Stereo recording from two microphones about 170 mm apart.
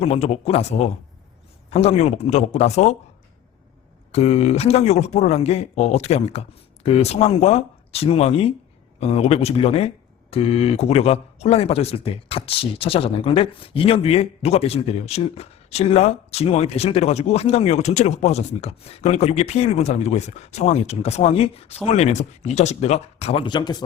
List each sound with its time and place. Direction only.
0.0 s speech: 40° left (ahead or behind)
4.1 s speech: 40° left (ahead or behind)